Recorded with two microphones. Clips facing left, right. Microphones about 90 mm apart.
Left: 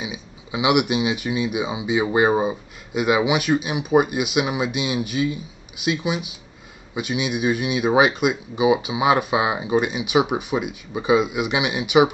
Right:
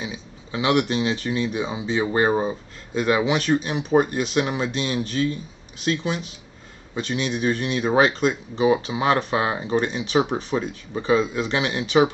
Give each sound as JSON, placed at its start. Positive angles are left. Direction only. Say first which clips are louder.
{"t": 0.0, "sound": "speech", "louder": "left 1 dB", "side_deg": 15}